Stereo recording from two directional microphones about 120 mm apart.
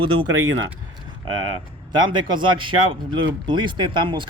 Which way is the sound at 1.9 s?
40° right (ahead or behind).